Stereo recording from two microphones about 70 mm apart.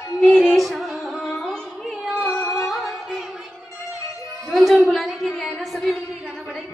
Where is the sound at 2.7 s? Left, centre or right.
Centre.